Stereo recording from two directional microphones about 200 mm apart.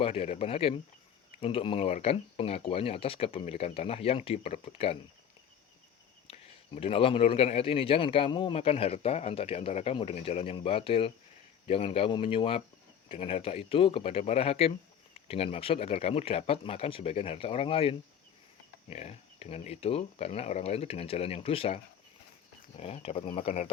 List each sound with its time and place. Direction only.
0.0 s a man's voice: 30° left (ahead or behind)
6.2 s a man's voice: 30° left (ahead or behind)
22.8 s speech: 30° left (ahead or behind)